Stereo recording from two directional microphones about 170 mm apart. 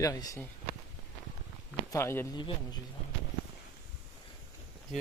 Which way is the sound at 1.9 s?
15° left (ahead or behind).